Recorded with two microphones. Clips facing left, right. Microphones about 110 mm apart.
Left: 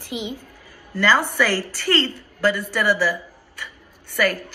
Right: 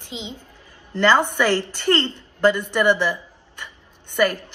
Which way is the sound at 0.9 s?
20° right (ahead or behind).